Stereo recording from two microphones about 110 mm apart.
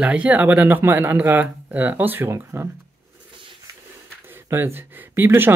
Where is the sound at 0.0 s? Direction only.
10° right (ahead or behind).